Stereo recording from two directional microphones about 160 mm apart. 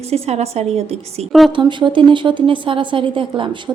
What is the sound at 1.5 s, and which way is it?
A woman's voice, 30° right (ahead or behind).